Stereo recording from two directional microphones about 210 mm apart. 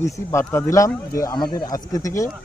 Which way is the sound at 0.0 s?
15° left (ahead or behind).